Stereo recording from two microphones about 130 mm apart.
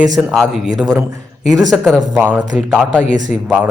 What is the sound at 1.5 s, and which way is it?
Speech, 30° right (ahead or behind).